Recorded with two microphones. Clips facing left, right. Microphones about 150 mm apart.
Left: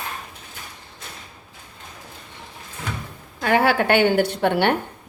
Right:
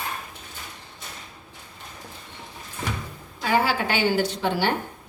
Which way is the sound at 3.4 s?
60° left (ahead or behind).